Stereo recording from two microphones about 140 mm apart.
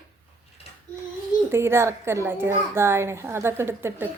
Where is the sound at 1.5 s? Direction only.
20° right (ahead or behind).